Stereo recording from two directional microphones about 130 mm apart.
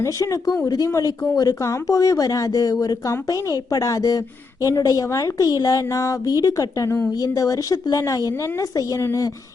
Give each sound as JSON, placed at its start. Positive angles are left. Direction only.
{"t": 0.0, "sound": "speech", "side_deg": 25}